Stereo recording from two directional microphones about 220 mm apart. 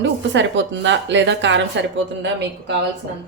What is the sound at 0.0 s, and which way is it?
Speech, 55° right (ahead or behind).